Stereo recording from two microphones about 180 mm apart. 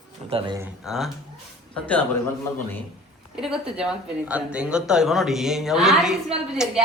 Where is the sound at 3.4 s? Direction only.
5° right (ahead or behind).